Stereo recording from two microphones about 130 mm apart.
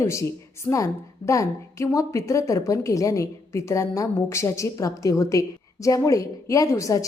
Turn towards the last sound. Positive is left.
turn(degrees=25)  # may be behind; listen again after turning